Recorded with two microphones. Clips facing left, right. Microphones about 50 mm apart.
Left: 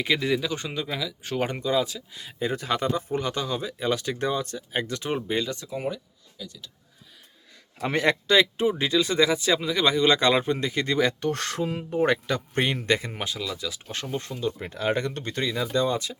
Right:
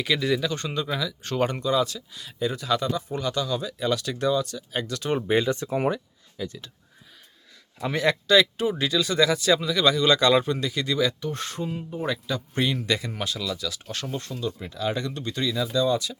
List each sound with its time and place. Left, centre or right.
0.0 s speech: left
5.3 s speech: right
5.6 s speech: right
6.3 s speech: right
7.8 s speech: left
11.2 s speech: left
13.1 s speech: left
14.6 s speech: left